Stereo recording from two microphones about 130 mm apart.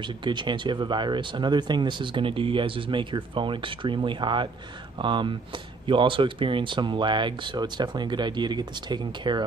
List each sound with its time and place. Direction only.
0.0 s speech: 35° right (ahead or behind)